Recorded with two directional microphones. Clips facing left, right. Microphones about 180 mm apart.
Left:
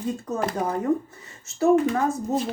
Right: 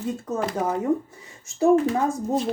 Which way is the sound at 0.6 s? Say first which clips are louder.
Right 1 dB; 10° right (ahead or behind).